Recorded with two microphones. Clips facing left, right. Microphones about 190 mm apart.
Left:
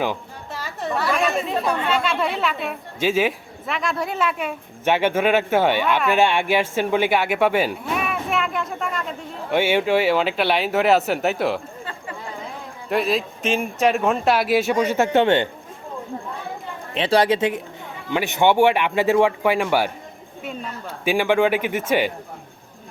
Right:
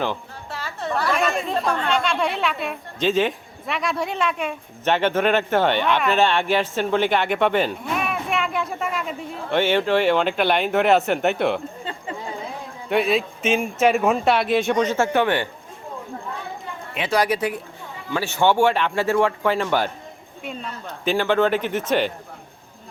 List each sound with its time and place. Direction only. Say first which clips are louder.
0.6 s chatter: left 1 dB; 15° left (ahead or behind)
0.9 s chatter: left 1 dB; centre (ahead or behind)
1.7 s a woman's voice: even; 5° left (ahead or behind)
9.5 s speech: left 1 dB; 10° left (ahead or behind)
12.9 s speech: right 1 dB; centre (ahead or behind)
14.9 s speech: left 3 dB; 20° left (ahead or behind)
16.9 s a woman's voice: left 3 dB; 30° left (ahead or behind); by 22.1 s 10° left (ahead or behind)